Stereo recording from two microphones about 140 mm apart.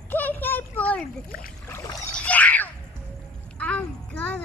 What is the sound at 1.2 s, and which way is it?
Speech, 90° left.